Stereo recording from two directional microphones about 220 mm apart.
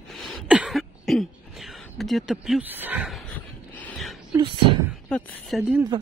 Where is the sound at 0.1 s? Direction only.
Centre (ahead or behind).